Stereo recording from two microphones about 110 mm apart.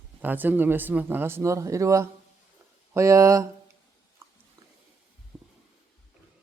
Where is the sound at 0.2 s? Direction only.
15° right (ahead or behind).